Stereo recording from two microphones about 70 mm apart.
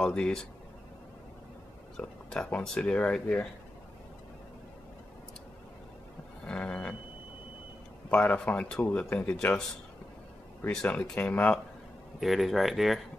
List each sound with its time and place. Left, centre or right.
0.0 s speech: centre
2.0 s speech: centre
6.4 s a sound: centre
8.1 s speech: centre
10.9 s speech: left
12.2 s speech: centre